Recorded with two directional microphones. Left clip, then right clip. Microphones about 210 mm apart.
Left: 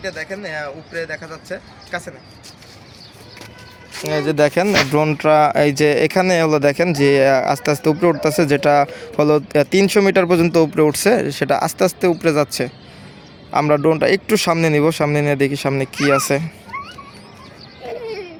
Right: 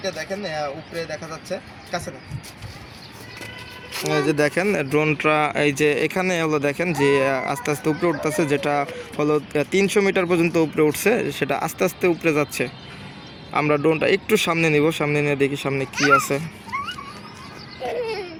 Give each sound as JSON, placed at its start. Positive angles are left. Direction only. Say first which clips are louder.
{"t": 0.0, "sound": "speech", "louder": "left 1 dB", "side_deg": 0}
{"t": 1.9, "sound": "speech", "louder": "left 2 dB", "side_deg": 20}
{"t": 4.4, "sound": "speech", "louder": "left 6 dB", "side_deg": 50}